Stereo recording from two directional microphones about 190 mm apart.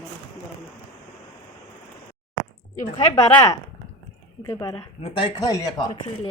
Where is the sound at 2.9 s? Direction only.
20° left (ahead or behind).